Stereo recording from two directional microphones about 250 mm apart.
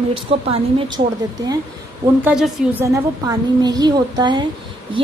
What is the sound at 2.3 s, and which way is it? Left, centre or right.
A woman's voice, centre.